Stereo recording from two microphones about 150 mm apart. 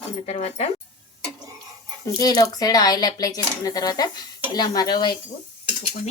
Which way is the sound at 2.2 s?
25° left (ahead or behind).